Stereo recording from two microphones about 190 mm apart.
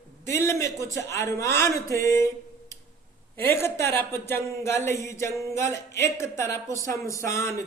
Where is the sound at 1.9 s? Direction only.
15° left (ahead or behind).